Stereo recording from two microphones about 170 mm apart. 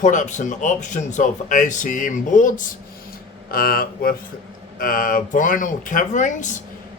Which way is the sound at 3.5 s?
60° left (ahead or behind).